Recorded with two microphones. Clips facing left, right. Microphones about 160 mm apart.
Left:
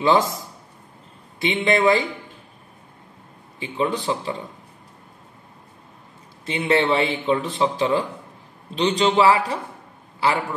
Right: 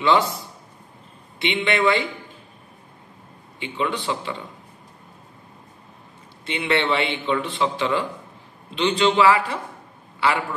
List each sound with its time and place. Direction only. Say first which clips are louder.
0.0 s a man's voice: left 1 dB; 40° left (ahead or behind)
1.4 s a man's voice: left 2 dB; 40° left (ahead or behind)
3.5 s a man's voice: left 2 dB; 40° left (ahead or behind)
6.4 s a man's voice: left 3 dB; 40° left (ahead or behind)